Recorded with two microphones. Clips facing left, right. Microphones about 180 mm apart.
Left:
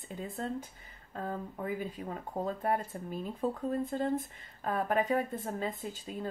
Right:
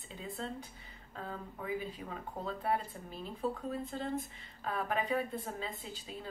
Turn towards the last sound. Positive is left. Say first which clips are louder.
# left 6 dB
turn(degrees=50)  # may be behind; listen again after turning